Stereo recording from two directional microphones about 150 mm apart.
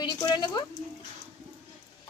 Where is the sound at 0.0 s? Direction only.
25° left (ahead or behind).